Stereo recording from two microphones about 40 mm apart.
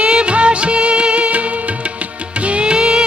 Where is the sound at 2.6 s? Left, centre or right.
Right.